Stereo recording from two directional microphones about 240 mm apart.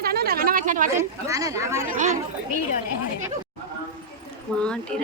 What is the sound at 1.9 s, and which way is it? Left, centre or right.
Speech, right.